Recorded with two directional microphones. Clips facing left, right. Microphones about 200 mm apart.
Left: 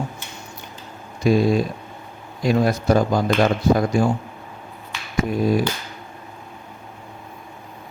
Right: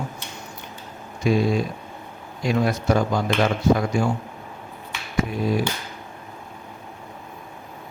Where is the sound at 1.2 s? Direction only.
40° left (ahead or behind).